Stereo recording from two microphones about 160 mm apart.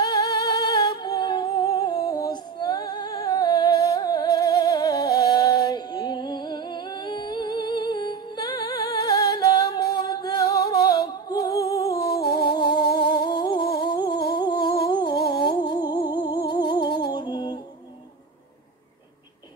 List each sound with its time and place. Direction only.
0.0 s humming: 20° left (ahead or behind)
12.0 s music: 75° left (ahead or behind)
12.4 s music: 30° left (ahead or behind)
12.8 s humming: 75° left (ahead or behind)
13.2 s music: 25° left (ahead or behind)
13.8 s a sound: 30° left (ahead or behind)
15.4 s music: 25° left (ahead or behind)